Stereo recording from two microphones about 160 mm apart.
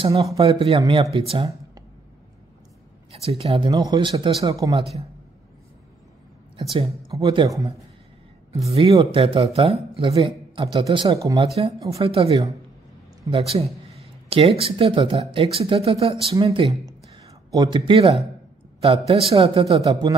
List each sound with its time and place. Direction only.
0.0 s speech: 40° right (ahead or behind)
3.1 s speech: 40° right (ahead or behind); by 4.7 s 20° right (ahead or behind)
6.5 s speech: 40° right (ahead or behind)
7.1 s speech: 25° right (ahead or behind)
8.5 s speech: 40° right (ahead or behind)